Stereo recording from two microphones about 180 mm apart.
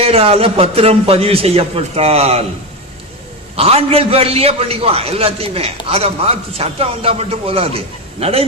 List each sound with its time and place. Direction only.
0.0 s a man's voice: 35° right (ahead or behind)
3.5 s a man's voice: 35° right (ahead or behind)